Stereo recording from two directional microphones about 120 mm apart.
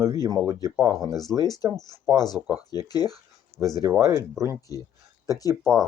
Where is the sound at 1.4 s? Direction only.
30° left (ahead or behind).